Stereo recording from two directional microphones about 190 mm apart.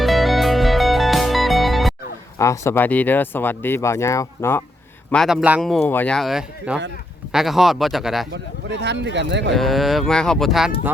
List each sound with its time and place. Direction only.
0.0 s music: centre (ahead or behind)
2.4 s speech: 15° left (ahead or behind)
5.1 s speech: centre (ahead or behind)
5.8 s speech: 10° left (ahead or behind)
8.3 s speech: 65° right (ahead or behind)
9.6 s speech: centre (ahead or behind)